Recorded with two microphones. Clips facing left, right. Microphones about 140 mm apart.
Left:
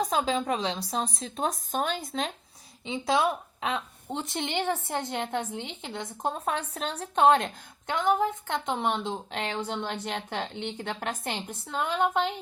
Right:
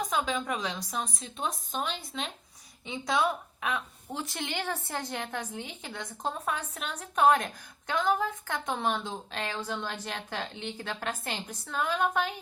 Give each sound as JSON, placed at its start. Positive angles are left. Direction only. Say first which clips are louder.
{"t": 0.0, "sound": "speech", "louder": "left 4 dB", "side_deg": 35}
{"t": 2.8, "sound": "a woman's voice", "louder": "left 3 dB", "side_deg": 25}